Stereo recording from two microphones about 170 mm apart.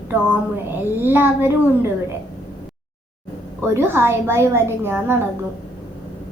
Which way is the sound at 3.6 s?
15° right (ahead or behind).